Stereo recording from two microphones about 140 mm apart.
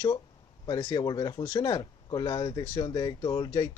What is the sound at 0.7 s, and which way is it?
Speech, 30° left (ahead or behind).